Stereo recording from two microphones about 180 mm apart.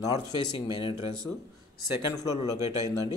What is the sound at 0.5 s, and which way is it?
Speech, 25° left (ahead or behind).